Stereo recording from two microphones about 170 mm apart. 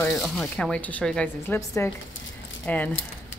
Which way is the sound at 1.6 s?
20° left (ahead or behind).